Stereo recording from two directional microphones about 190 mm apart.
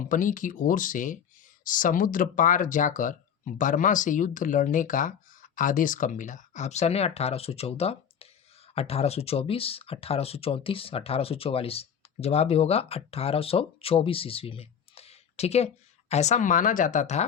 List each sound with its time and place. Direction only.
0.0 s speech: 45° left (ahead or behind)